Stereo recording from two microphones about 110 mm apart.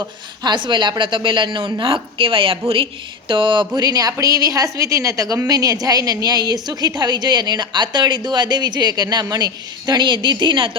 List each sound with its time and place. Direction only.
0.4 s speech: 45° right (ahead or behind)
3.8 s a woman's voice: 35° right (ahead or behind)